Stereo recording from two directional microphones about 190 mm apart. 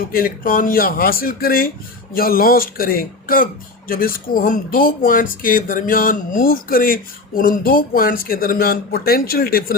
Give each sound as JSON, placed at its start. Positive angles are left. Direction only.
{"t": 0.1, "sound": "speech", "side_deg": 50}